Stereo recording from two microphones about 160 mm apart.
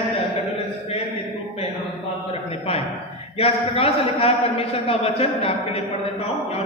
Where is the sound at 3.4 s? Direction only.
40° left (ahead or behind).